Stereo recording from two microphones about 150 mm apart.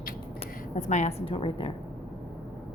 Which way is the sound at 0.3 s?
50° left (ahead or behind).